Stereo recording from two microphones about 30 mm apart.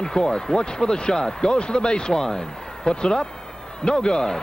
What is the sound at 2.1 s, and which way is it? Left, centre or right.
Speech, centre.